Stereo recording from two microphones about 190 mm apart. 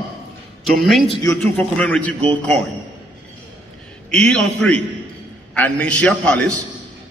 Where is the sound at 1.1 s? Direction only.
15° left (ahead or behind).